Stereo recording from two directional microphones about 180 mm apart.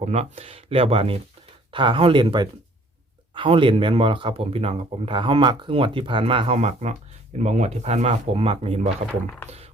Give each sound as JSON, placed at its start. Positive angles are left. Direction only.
{"t": 0.0, "sound": "speech", "side_deg": -35}